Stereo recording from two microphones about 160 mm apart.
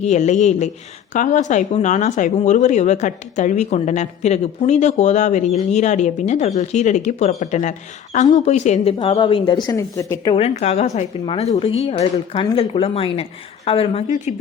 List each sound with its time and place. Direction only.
0.0 s speech: 45° left (ahead or behind); by 10.3 s 20° left (ahead or behind)
10.3 s speech: 40° left (ahead or behind)